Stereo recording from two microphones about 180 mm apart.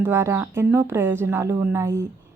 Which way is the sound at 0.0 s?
15° right (ahead or behind).